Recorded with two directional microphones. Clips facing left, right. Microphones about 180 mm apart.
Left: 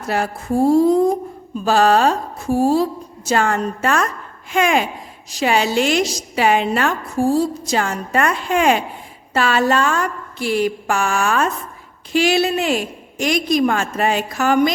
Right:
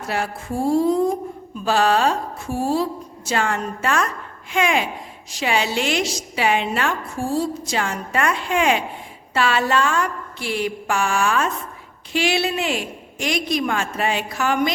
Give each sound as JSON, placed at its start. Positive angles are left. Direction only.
{"t": 0.1, "sound": "a woman's voice", "side_deg": 40}